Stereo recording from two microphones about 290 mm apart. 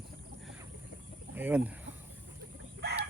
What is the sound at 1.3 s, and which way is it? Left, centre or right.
Speech, centre.